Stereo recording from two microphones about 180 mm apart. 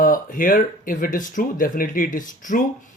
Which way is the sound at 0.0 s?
50° left (ahead or behind).